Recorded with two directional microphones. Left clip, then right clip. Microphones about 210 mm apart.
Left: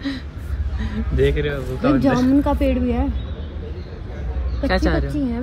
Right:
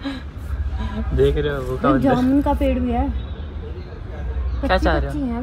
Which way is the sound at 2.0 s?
Centre (ahead or behind).